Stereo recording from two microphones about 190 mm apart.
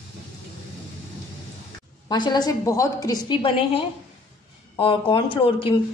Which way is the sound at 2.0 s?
20° left (ahead or behind).